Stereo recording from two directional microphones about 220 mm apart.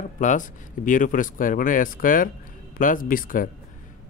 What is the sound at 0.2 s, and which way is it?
Speech, 35° left (ahead or behind).